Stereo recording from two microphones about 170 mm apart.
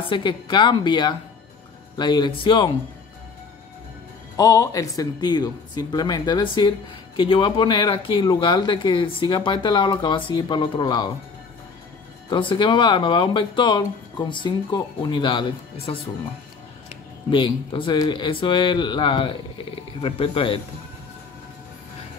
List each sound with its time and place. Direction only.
0.1 s speech: 30° left (ahead or behind)
4.4 s speech: 20° left (ahead or behind)
12.3 s speech: 30° left (ahead or behind)
17.3 s speech: 30° left (ahead or behind)